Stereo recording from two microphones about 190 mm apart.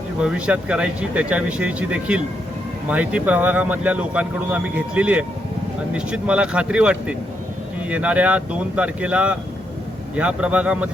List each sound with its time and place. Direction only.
0.2 s speech: 5° right (ahead or behind)